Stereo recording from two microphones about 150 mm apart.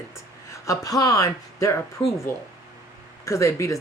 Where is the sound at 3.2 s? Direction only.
20° left (ahead or behind).